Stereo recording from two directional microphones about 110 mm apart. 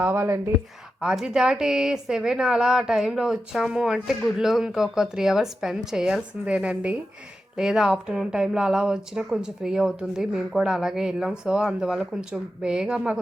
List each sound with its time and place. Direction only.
0.0 s speech: 20° right (ahead or behind)
1.0 s speech: 5° right (ahead or behind)